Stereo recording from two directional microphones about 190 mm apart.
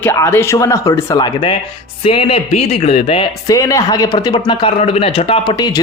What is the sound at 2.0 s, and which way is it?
Speech, 30° left (ahead or behind).